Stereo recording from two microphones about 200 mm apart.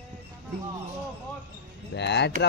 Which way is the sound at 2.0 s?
60° left (ahead or behind).